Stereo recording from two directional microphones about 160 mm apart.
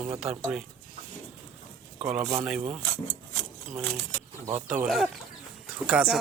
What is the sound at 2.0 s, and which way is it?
Speech, 5° right (ahead or behind).